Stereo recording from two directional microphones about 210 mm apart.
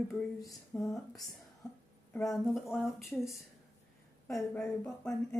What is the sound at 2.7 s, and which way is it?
A woman's voice, centre (ahead or behind).